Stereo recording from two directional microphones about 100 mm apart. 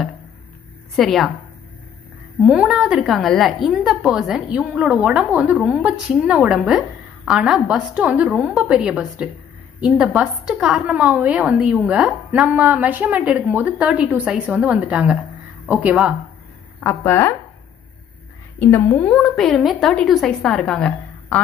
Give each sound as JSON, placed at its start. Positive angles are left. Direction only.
{"t": 0.9, "sound": "a woman's voice", "side_deg": 0}
{"t": 2.4, "sound": "a woman's voice", "side_deg": -10}
{"t": 16.8, "sound": "speech", "side_deg": 25}
{"t": 18.6, "sound": "a woman's voice", "side_deg": 20}